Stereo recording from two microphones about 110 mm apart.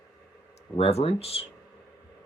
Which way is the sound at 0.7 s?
65° left (ahead or behind).